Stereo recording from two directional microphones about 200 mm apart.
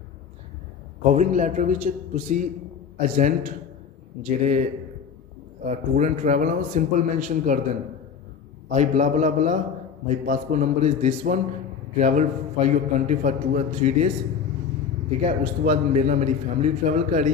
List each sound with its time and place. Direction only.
1.0 s a man's voice: 40° right (ahead or behind)
5.7 s a man's voice: 35° right (ahead or behind)
8.6 s a man's voice: 40° right (ahead or behind)
15.2 s a man's voice: 35° right (ahead or behind)